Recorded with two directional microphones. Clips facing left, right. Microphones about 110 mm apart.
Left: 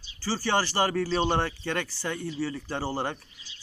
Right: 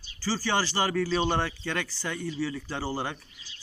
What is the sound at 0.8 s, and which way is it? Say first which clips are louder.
Speech: left 1 dB; 35° left (ahead or behind).